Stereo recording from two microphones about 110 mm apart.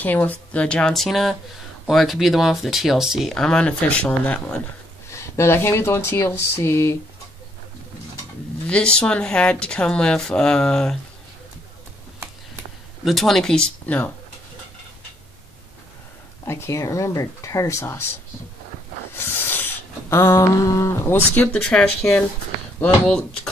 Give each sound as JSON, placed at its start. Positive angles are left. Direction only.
{"t": 0.0, "sound": "speech", "side_deg": 15}
{"t": 5.1, "sound": "speech", "side_deg": 25}
{"t": 8.6, "sound": "speech", "side_deg": 10}
{"t": 13.0, "sound": "speech", "side_deg": 0}
{"t": 16.4, "sound": "speech", "side_deg": 25}
{"t": 19.1, "sound": "a sound", "side_deg": 20}
{"t": 21.4, "sound": "speech", "side_deg": 10}
{"t": 22.0, "sound": "speech", "side_deg": 20}